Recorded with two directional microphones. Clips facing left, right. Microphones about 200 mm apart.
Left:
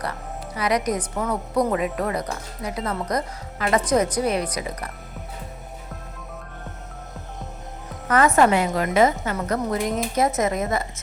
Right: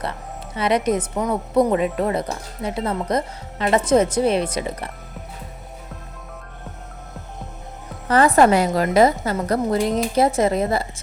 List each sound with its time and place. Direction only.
0.0 s speech: 25° right (ahead or behind)
8.0 s a woman's voice: 30° right (ahead or behind)